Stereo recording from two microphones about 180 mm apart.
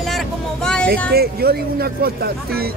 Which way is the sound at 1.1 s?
60° right (ahead or behind).